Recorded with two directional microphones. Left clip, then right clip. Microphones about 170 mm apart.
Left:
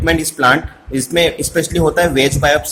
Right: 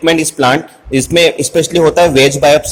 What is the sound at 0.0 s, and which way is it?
A man's voice, 20° right (ahead or behind).